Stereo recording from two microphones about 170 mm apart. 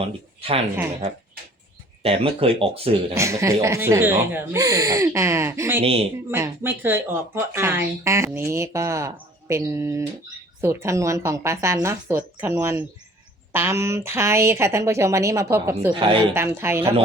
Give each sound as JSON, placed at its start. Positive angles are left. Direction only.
{"t": 2.0, "sound": "speech", "side_deg": -35}
{"t": 3.2, "sound": "speech", "side_deg": -15}
{"t": 5.8, "sound": "speech", "side_deg": -35}
{"t": 6.3, "sound": "speech", "side_deg": -15}
{"t": 15.9, "sound": "speech", "side_deg": -30}
{"t": 16.3, "sound": "speech", "side_deg": -15}